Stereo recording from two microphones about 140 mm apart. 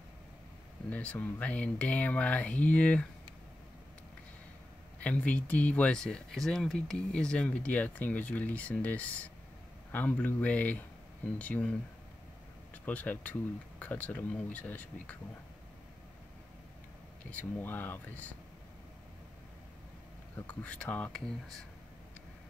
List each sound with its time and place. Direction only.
0.8 s speech: 10° left (ahead or behind)
5.0 s speech: 10° left (ahead or behind)
12.7 s speech: 10° left (ahead or behind)
17.3 s speech: 10° left (ahead or behind)
20.3 s speech: 10° left (ahead or behind)